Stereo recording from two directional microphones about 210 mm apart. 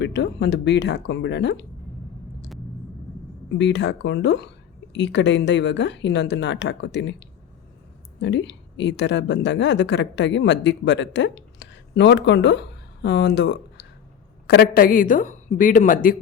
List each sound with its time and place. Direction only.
0.0 s speech: 55° left (ahead or behind)
3.6 s a woman's voice: 55° left (ahead or behind); by 16.1 s 40° left (ahead or behind)